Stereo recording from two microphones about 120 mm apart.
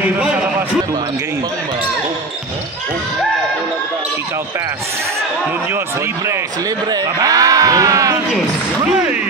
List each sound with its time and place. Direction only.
6.9 s sheep: 30° right (ahead or behind)